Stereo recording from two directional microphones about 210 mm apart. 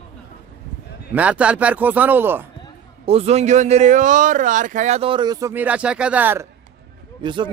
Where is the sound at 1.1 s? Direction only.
5° right (ahead or behind).